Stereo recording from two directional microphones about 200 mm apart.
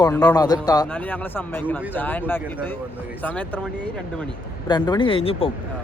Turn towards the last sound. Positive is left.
turn(degrees=25)  # may be behind; listen again after turning